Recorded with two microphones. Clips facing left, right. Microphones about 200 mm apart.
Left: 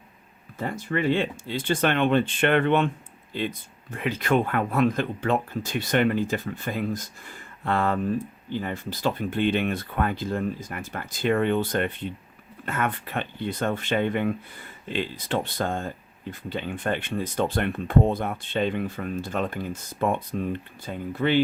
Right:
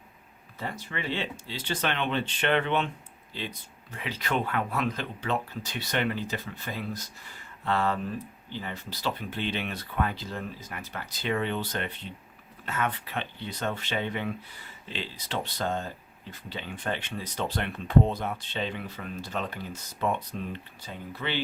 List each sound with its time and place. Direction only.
0.6 s speech: 50° left (ahead or behind)